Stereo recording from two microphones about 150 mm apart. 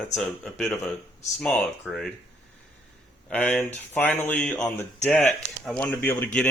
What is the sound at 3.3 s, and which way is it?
Speech, 10° left (ahead or behind).